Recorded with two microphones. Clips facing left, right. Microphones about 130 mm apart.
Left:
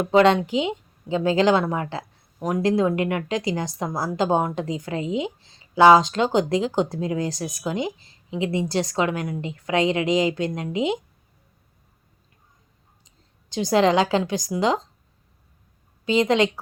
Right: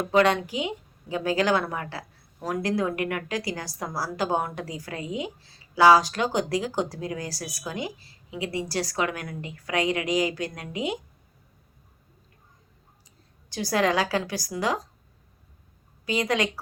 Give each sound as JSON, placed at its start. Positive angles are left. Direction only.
{"t": 0.0, "sound": "speech", "side_deg": 25}
{"t": 13.5, "sound": "speech", "side_deg": 20}
{"t": 16.0, "sound": "speech", "side_deg": 25}